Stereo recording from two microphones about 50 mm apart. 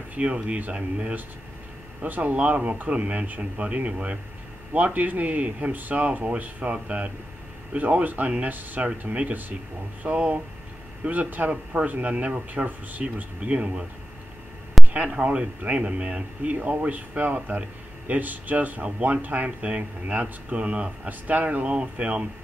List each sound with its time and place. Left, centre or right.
0.1 s speech: right
2.0 s speech: right
14.9 s speech: right